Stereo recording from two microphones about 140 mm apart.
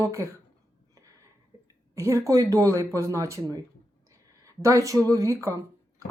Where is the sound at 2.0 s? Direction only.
20° right (ahead or behind).